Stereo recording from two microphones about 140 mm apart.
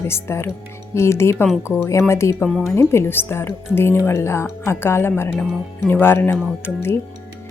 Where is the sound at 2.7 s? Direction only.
20° left (ahead or behind).